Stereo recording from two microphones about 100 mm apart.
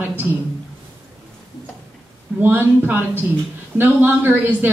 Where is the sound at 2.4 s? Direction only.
20° right (ahead or behind).